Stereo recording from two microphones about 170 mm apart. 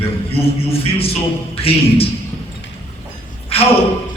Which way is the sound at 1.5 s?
35° left (ahead or behind).